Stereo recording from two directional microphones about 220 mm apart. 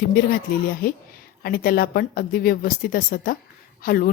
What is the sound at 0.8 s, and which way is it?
A woman's voice, 40° left (ahead or behind).